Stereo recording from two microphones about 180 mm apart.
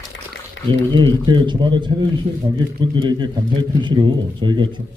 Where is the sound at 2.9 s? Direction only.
25° right (ahead or behind).